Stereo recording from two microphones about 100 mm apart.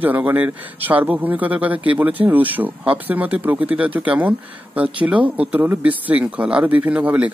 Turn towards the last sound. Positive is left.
turn(degrees=-15)  # may be behind; listen again after turning